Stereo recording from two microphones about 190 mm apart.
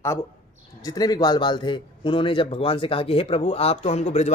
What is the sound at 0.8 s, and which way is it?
A man's voice, 20° left (ahead or behind).